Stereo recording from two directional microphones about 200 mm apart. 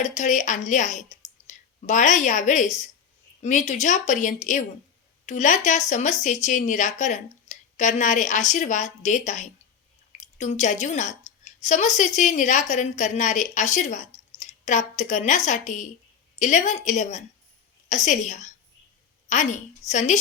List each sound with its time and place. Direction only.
0.0 s a woman's voice: 35° left (ahead or behind)